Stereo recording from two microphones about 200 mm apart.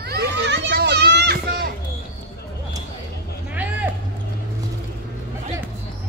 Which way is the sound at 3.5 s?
10° right (ahead or behind).